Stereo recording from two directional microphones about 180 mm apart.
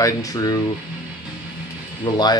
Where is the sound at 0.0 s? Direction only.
20° left (ahead or behind).